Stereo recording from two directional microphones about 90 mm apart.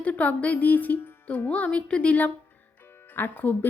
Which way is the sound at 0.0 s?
15° left (ahead or behind).